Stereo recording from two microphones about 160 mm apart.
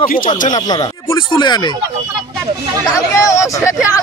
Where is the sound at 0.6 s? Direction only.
25° left (ahead or behind).